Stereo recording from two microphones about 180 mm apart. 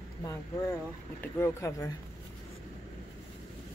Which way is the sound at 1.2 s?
15° left (ahead or behind).